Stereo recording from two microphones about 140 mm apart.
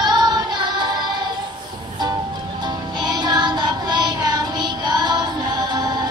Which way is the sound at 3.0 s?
30° right (ahead or behind).